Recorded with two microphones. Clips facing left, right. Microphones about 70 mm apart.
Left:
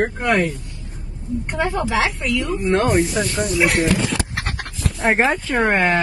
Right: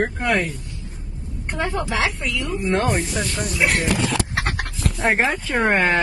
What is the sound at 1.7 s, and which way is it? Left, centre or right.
A woman's voice, centre.